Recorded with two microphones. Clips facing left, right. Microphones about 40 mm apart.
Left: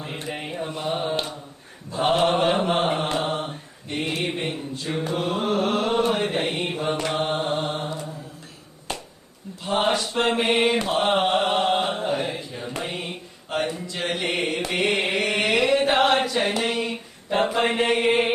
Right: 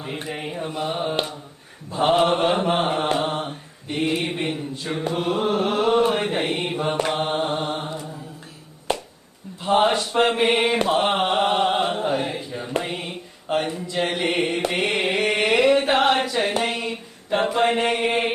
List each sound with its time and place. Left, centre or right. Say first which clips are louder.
0.0 s mantra: right 2 dB; centre
3.9 s mantra: right 3 dB; centre
6.2 s mantra: right 1 dB; centre
7.7 s mantra: right 1 dB; centre
9.9 s mantra: right 3 dB; right
10.2 s mantra: left 1 dB; centre
10.8 s chant: right 1 dB; centre
12.8 s music: right 1 dB; centre
13.5 s a sound: right 3 dB; right
13.9 s mantra: right 6 dB; centre
15.4 s music: right 3 dB; centre
16.2 s chant: even; centre
16.8 s a sound: even; centre
17.7 s mantra: even; centre